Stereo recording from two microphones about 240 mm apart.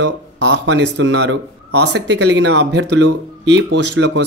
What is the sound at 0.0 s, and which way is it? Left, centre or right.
Speech, right.